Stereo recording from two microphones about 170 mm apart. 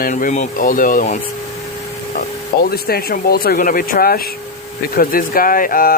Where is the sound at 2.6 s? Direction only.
65° left (ahead or behind).